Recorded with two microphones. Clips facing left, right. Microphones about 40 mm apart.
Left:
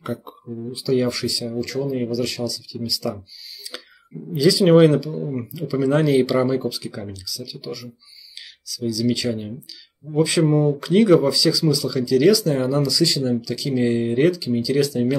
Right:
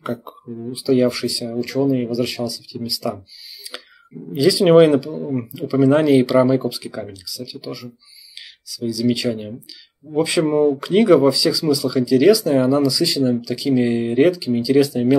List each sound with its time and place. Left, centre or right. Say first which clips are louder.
0.0 s speech: right 3 dB; centre
4.4 s speech: right 2 dB; centre